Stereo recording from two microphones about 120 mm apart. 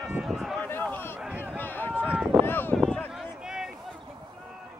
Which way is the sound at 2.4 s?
15° left (ahead or behind).